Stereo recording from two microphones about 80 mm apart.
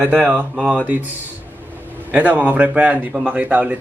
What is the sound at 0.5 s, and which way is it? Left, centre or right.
Speech, centre.